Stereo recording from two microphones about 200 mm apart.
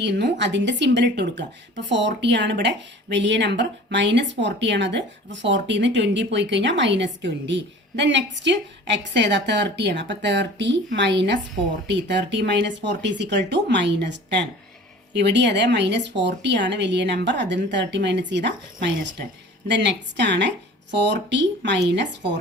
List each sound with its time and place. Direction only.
0.0 s speech: 60° right (ahead or behind)
19.6 s speech: 60° right (ahead or behind)